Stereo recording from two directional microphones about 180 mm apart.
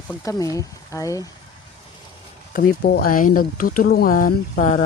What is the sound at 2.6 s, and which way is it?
Speech, 60° left (ahead or behind).